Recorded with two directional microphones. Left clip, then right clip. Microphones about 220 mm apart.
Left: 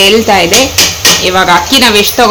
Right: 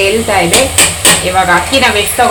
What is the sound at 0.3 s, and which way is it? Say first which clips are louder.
Speech: left 4 dB; 35° left (ahead or behind).